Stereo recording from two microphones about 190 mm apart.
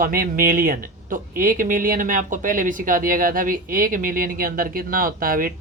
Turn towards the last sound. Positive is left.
turn(degrees=-50)  # may be behind; listen again after turning